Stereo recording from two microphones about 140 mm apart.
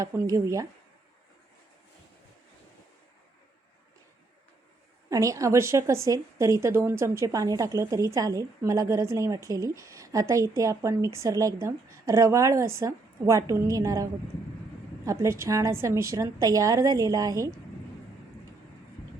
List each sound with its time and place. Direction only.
0.1 s a woman's voice: 20° right (ahead or behind)
5.0 s a woman's voice: 25° right (ahead or behind)